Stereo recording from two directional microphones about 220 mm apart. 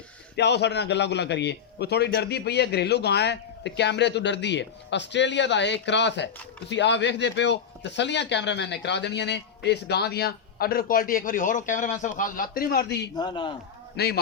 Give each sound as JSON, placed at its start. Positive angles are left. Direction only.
{"t": 0.3, "sound": "speech", "side_deg": 50}
{"t": 13.1, "sound": "a man's voice", "side_deg": 20}
{"t": 13.9, "sound": "a man's voice", "side_deg": 45}